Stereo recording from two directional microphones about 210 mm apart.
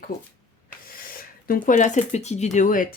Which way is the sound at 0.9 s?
45° left (ahead or behind).